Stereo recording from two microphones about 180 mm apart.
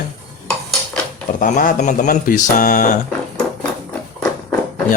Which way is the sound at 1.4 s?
50° left (ahead or behind).